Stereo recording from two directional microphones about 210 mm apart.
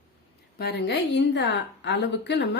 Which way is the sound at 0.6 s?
50° left (ahead or behind).